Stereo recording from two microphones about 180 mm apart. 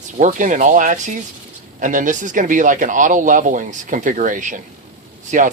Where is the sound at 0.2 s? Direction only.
45° right (ahead or behind).